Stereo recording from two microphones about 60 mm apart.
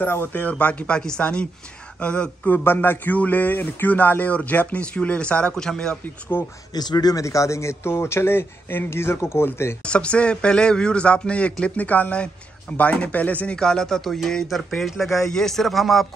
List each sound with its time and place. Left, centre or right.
0.0 s speech: left
0.9 s speech: centre
6.3 s speech: left
6.7 s speech: left
9.8 s speech: centre
13.6 s speech: centre